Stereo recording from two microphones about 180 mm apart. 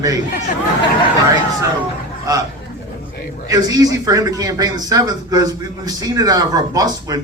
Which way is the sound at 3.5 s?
20° right (ahead or behind).